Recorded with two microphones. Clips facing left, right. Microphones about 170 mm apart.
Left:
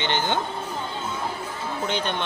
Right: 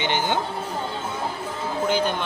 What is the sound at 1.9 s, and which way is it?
Speech, 5° right (ahead or behind).